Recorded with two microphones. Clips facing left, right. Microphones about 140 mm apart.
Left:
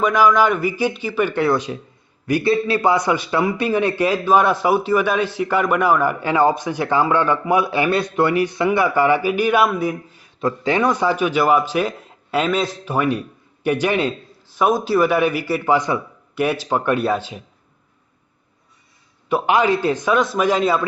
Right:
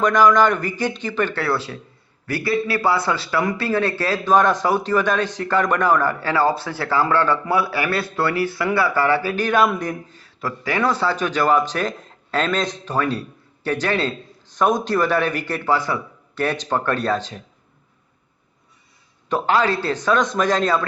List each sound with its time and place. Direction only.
0.0 s a man's voice: 5° left (ahead or behind)
19.3 s a man's voice: 15° left (ahead or behind)